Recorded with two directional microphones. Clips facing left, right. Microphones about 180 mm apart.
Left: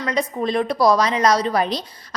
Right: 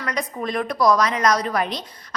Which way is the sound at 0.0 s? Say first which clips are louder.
Left 5 dB; 25° left (ahead or behind).